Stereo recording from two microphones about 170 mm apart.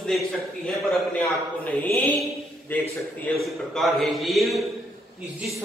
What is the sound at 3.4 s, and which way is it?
A man's voice, centre (ahead or behind).